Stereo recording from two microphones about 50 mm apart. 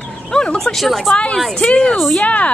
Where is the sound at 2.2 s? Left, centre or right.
Left.